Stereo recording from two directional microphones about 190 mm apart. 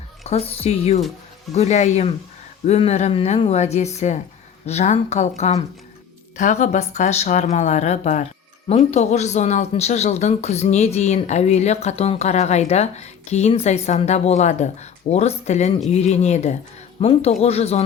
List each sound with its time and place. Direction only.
0.3 s speech: 30° left (ahead or behind)